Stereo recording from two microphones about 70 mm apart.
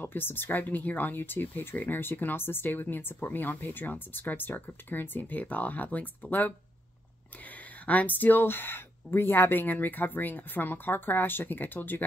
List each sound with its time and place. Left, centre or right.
0.0 s speech: left
7.8 s speech: left